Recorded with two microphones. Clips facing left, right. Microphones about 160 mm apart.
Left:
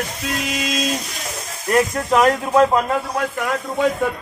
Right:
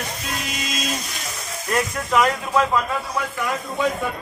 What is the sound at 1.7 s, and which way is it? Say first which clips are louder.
Speech: left 4 dB; 35° left (ahead or behind).